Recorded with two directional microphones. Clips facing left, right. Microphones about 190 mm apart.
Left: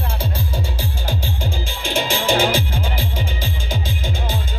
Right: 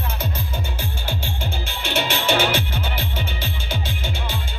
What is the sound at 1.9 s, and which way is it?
Music, 30° left (ahead or behind).